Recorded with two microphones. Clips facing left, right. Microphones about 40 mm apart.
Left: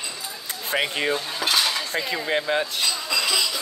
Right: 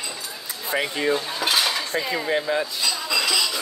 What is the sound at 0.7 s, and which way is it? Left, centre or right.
Speech, left.